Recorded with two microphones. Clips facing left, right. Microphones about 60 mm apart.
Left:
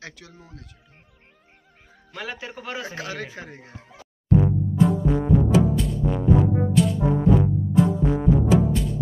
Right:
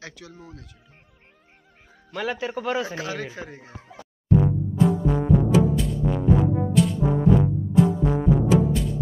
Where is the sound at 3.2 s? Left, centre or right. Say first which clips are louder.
Right 1 dB; left.